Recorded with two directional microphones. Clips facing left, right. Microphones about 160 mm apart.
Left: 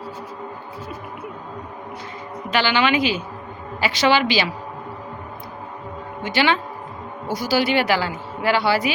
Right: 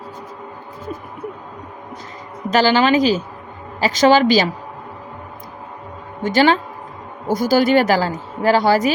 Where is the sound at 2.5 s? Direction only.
40° right (ahead or behind).